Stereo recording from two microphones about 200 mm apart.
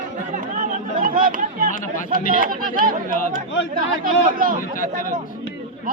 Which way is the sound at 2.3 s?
45° right (ahead or behind).